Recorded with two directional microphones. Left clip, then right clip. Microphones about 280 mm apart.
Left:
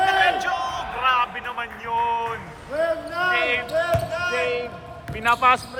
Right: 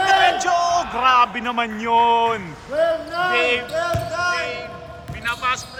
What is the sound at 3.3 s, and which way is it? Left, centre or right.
Speech, centre.